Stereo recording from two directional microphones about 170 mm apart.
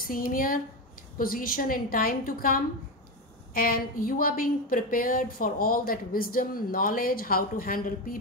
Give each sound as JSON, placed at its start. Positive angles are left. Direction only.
{"t": 0.0, "sound": "a woman's voice", "side_deg": 55}